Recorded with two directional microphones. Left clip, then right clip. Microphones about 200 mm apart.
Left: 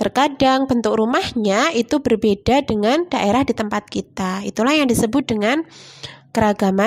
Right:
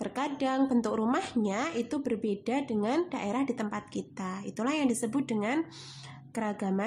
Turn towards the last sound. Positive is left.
turn(degrees=40)  # may be behind; listen again after turning